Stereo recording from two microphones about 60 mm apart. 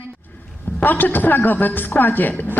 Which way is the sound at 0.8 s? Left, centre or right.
Left.